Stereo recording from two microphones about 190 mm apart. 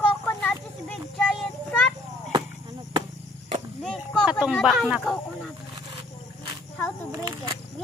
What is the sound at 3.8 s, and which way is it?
Speech, 5° left (ahead or behind).